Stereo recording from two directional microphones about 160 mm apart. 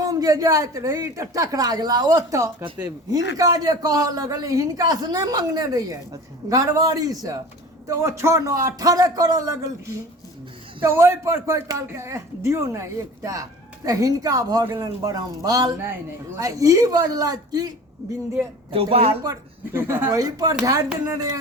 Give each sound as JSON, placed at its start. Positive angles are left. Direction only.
{"t": 0.0, "sound": "speech", "side_deg": -20}
{"t": 10.9, "sound": "speech", "side_deg": -15}
{"t": 18.7, "sound": "a woman's voice", "side_deg": -35}
{"t": 19.2, "sound": "speech", "side_deg": -20}